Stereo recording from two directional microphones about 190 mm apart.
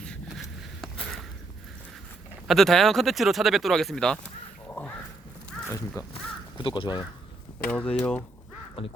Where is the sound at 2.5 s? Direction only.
Centre (ahead or behind).